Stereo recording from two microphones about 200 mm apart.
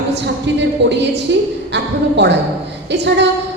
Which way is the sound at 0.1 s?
60° right (ahead or behind).